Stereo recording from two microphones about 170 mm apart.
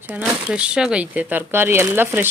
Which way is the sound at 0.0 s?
10° right (ahead or behind).